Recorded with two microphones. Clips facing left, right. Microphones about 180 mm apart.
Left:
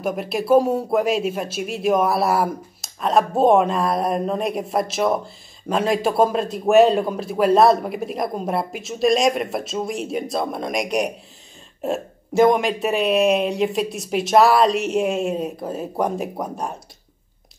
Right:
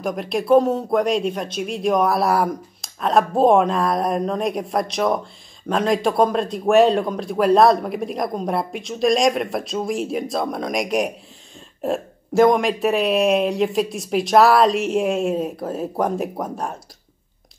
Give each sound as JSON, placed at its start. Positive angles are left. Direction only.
{"t": 0.0, "sound": "speech", "side_deg": 5}